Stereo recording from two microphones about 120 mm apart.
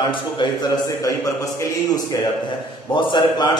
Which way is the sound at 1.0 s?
25° left (ahead or behind).